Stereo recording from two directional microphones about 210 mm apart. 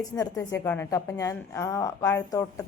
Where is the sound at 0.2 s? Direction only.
15° left (ahead or behind).